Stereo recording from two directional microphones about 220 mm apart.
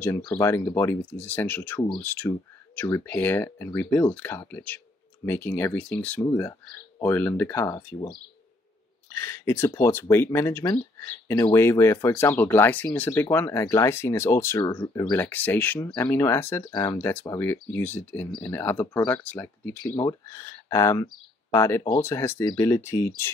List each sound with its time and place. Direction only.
0.0 s speech: 10° left (ahead or behind)
9.1 s speech: 10° left (ahead or behind)